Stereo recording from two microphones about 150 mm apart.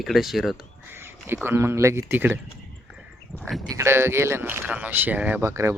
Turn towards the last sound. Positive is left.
turn(degrees=-20)  # may be behind; listen again after turning